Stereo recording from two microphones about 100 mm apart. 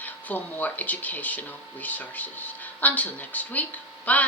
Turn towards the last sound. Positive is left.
turn(degrees=15)  # may be behind; listen again after turning